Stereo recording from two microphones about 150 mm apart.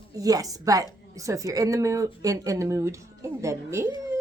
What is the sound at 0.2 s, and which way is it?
A woman's voice, 25° right (ahead or behind).